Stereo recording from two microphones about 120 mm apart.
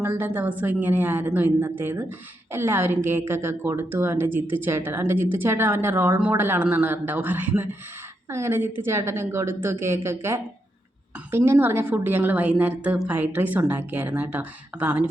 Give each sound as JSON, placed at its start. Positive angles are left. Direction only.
{"t": 0.0, "sound": "a woman's voice", "side_deg": -15}